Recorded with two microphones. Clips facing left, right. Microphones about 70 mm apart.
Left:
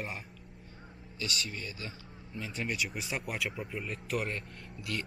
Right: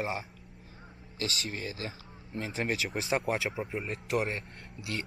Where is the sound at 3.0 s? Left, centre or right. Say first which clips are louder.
Right 5 dB; right.